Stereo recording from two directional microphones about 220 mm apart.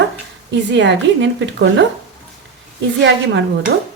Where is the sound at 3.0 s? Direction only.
55° right (ahead or behind).